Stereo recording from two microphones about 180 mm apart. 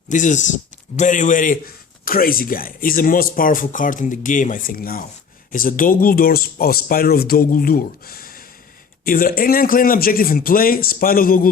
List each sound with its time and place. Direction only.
0.1 s a man's voice: 45° left (ahead or behind)